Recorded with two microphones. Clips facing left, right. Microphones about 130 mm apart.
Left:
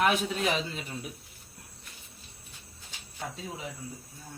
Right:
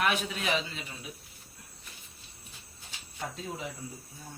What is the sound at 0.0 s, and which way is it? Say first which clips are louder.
Speech: left 3 dB; 35° left (ahead or behind).